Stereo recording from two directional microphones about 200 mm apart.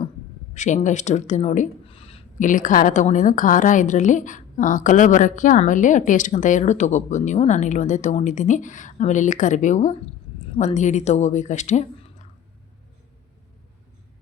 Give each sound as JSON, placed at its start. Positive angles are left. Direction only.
{"t": 0.5, "sound": "speech", "side_deg": 35}